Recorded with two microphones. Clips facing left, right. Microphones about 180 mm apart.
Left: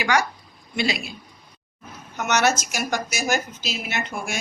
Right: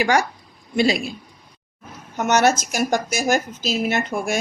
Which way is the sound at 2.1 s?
50° right (ahead or behind).